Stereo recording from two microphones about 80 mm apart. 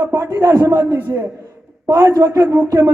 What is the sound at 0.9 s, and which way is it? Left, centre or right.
A man's voice, right.